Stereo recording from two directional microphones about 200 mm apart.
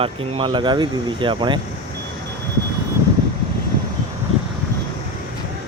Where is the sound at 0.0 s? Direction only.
25° right (ahead or behind).